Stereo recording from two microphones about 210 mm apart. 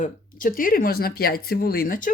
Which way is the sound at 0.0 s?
40° left (ahead or behind).